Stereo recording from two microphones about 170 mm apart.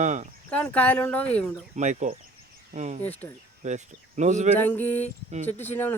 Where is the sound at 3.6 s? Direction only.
45° right (ahead or behind).